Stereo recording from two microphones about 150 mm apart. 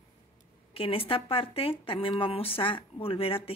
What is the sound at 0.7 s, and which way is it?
Speech, 35° left (ahead or behind).